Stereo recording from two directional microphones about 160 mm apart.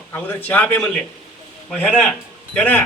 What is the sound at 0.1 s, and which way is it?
A man's voice, 10° left (ahead or behind).